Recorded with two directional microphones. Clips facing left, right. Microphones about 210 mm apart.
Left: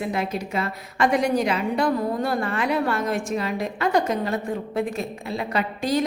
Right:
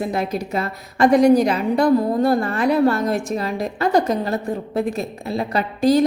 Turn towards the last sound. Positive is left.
turn(degrees=-35)  # may be behind; listen again after turning